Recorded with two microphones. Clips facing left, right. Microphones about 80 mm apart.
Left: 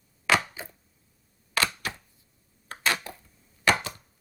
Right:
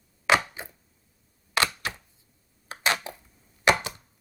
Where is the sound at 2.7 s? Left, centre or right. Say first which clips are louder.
Right 1 dB; centre.